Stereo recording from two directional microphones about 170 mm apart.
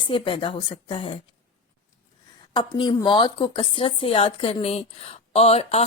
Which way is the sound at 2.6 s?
25° left (ahead or behind).